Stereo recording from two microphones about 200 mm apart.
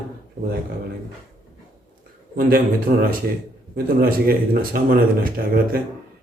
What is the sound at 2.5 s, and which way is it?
Speech, 45° right (ahead or behind).